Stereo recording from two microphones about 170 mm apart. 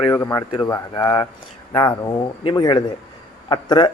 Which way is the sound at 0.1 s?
15° left (ahead or behind).